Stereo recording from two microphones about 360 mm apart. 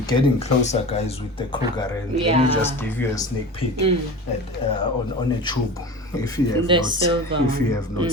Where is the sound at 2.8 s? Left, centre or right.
Centre.